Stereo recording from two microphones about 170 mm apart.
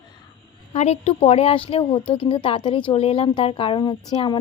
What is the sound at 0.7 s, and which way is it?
A woman's voice, 40° left (ahead or behind).